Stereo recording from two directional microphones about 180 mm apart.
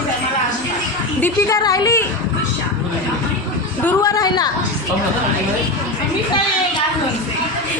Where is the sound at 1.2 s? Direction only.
20° left (ahead or behind).